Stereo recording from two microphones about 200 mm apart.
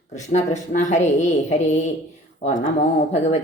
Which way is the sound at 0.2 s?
35° left (ahead or behind).